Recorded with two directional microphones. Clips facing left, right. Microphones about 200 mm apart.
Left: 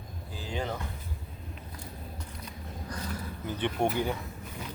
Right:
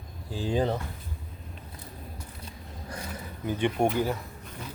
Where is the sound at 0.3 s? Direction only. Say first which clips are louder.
Right 8 dB; 30° right (ahead or behind).